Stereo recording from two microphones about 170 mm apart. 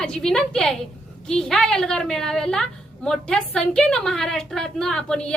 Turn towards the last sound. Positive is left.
turn(degrees=5)  # may be behind; listen again after turning